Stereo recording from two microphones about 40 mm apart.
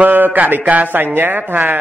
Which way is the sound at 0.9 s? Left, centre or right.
Right.